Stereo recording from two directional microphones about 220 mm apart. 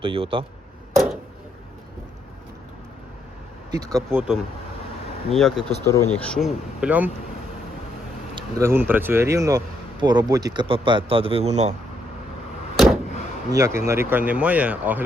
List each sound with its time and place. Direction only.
0.0 s speech: 25° right (ahead or behind)
3.7 s speech: 15° right (ahead or behind)
5.3 s speech: centre (ahead or behind)
8.4 s speech: 15° right (ahead or behind); by 11.7 s 30° right (ahead or behind)
12.7 s vehicle: centre (ahead or behind)
13.5 s speech: 15° right (ahead or behind)